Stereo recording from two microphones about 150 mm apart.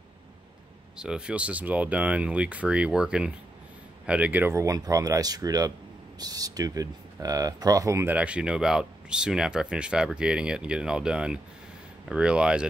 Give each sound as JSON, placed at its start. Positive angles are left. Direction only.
{"t": 0.9, "sound": "speech", "side_deg": -5}